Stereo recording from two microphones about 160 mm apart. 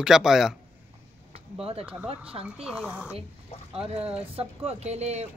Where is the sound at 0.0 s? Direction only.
5° right (ahead or behind).